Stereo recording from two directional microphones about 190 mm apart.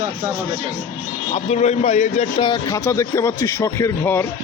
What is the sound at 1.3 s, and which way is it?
A man's voice, 35° left (ahead or behind).